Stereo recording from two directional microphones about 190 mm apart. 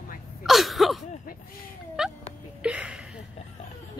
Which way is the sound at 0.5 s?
Centre (ahead or behind).